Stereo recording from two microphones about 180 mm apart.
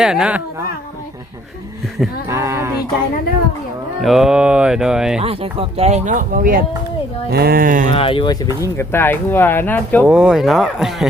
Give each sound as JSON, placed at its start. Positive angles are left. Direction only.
{"t": 0.0, "sound": "mantra", "side_deg": -5}
{"t": 2.3, "sound": "speech", "side_deg": -15}
{"t": 4.0, "sound": "mantra", "side_deg": 0}
{"t": 5.2, "sound": "speech", "side_deg": -30}
{"t": 7.9, "sound": "speech", "side_deg": 30}
{"t": 8.6, "sound": "speech", "side_deg": 15}
{"t": 10.1, "sound": "mantra", "side_deg": -5}